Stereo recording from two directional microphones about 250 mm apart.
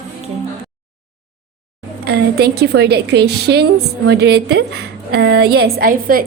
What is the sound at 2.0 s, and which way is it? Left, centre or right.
A woman's voice, right.